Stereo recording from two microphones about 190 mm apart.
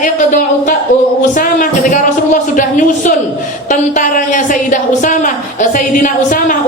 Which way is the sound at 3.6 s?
40° left (ahead or behind).